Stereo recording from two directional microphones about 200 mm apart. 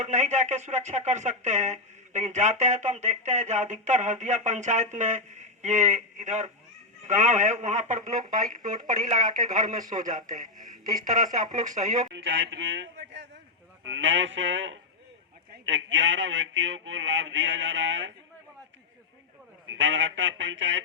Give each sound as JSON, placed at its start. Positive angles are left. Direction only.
{"t": 0.0, "sound": "speech", "side_deg": -35}
{"t": 10.8, "sound": "speech", "side_deg": -20}
{"t": 11.1, "sound": "speech", "side_deg": -40}
{"t": 12.1, "sound": "speech", "side_deg": -65}
{"t": 19.6, "sound": "speech", "side_deg": -70}